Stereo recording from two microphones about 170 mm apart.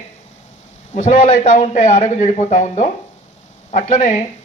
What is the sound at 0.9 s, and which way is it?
Speech, 45° left (ahead or behind).